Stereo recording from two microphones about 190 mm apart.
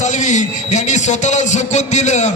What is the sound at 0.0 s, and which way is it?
A man's voice, 40° left (ahead or behind).